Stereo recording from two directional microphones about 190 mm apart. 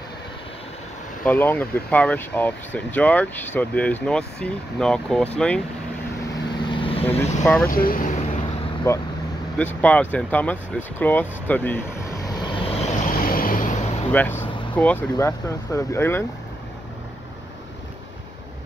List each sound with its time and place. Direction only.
1.2 s speech: 10° left (ahead or behind)
6.2 s vehicle: 25° left (ahead or behind)
7.2 s speech: 35° left (ahead or behind)
7.4 s speech: 10° left (ahead or behind)
7.7 s speech: 50° left (ahead or behind)
8.9 s speech: 15° left (ahead or behind)
12.3 s vehicle: 25° left (ahead or behind)
13.2 s vehicle: 50° left (ahead or behind)
14.1 s speech: 10° left (ahead or behind)